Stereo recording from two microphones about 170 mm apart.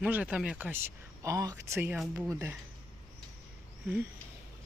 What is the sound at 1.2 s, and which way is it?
Speech, 20° right (ahead or behind).